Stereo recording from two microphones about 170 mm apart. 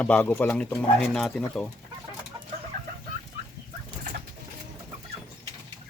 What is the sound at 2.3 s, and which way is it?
Chicken, 25° right (ahead or behind).